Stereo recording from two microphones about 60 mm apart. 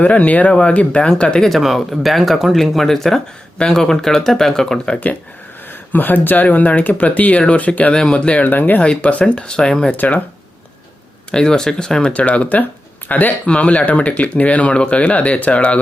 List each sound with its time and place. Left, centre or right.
0.0 s speech: left
1.5 s speech: centre
5.9 s speech: left
8.4 s speech: left; by 9.9 s centre
11.3 s speech: centre
12.1 s speech: left